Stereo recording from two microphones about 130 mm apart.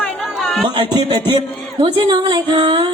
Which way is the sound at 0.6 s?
35° right (ahead or behind).